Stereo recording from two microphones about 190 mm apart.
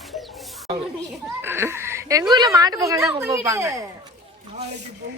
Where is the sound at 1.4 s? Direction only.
15° right (ahead or behind).